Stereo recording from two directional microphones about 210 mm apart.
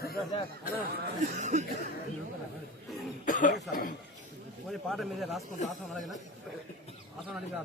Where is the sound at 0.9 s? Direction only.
45° right (ahead or behind).